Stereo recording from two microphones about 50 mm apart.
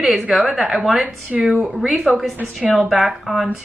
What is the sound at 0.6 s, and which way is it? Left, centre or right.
Speech, centre.